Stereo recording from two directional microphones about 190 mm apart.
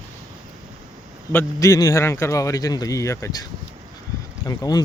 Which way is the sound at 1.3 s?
15° left (ahead or behind).